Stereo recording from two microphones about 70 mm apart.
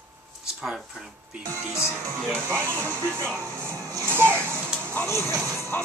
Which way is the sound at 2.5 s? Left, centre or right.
Right.